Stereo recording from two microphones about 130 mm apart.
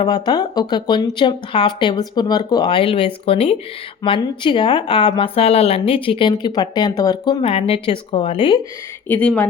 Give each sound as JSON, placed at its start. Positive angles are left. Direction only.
{"t": 0.0, "sound": "a woman's voice", "side_deg": 35}
{"t": 7.4, "sound": "speech", "side_deg": 45}
{"t": 9.0, "sound": "speech", "side_deg": 10}